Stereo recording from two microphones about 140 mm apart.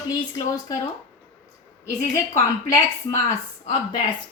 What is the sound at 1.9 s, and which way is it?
Speech, 20° left (ahead or behind).